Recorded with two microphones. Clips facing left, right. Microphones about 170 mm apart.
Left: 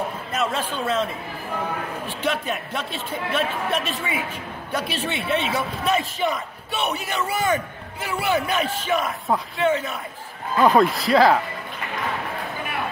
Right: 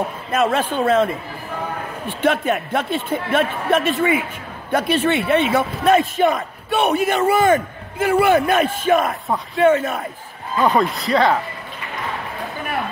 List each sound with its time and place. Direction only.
0.3 s a man's voice: 55° right (ahead or behind)
10.6 s speech: centre (ahead or behind)